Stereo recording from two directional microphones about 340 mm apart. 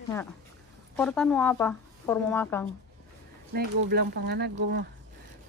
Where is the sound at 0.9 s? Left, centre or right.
Centre.